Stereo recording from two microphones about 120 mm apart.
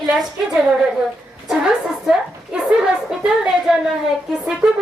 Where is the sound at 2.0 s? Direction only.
5° right (ahead or behind).